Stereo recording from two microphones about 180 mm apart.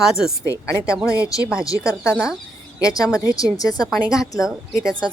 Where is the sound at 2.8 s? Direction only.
20° left (ahead or behind).